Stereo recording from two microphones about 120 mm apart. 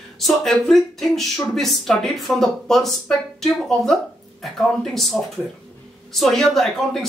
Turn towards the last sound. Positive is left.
turn(degrees=5)  # may be behind; listen again after turning